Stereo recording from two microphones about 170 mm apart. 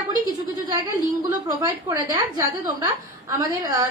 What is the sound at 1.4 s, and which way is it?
A woman's voice, 20° right (ahead or behind).